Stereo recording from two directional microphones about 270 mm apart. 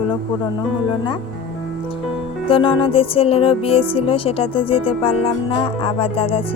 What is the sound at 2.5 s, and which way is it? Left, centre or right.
Music, centre.